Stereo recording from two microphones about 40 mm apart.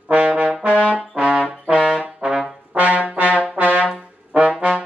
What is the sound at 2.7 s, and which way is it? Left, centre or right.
Brass instrument, right.